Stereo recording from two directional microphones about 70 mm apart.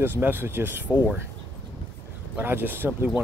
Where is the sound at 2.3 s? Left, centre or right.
Right.